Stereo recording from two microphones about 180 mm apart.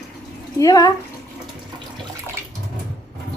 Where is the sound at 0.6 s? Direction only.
20° left (ahead or behind).